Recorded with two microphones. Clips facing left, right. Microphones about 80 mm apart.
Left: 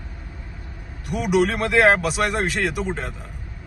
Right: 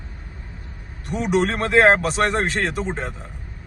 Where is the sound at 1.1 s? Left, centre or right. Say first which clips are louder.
Left 1 dB; right.